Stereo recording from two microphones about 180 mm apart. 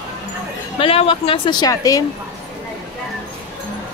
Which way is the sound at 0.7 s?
30° left (ahead or behind).